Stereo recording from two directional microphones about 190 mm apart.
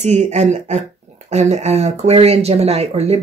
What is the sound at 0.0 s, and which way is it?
Speech, 35° right (ahead or behind).